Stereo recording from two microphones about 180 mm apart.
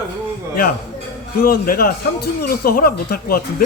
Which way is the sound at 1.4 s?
55° left (ahead or behind).